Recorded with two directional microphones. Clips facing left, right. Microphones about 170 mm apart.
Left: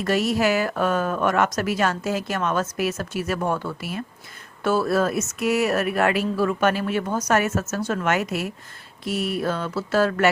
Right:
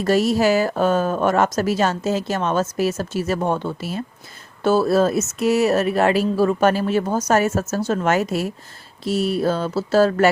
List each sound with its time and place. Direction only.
0.0 s speech: 30° right (ahead or behind)